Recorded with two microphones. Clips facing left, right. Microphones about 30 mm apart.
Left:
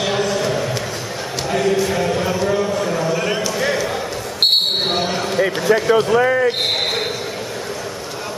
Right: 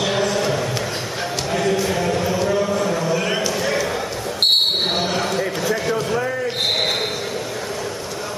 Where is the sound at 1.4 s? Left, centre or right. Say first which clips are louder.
Left 3 dB; centre.